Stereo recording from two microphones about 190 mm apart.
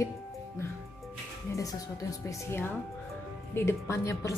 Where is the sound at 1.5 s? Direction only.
15° left (ahead or behind).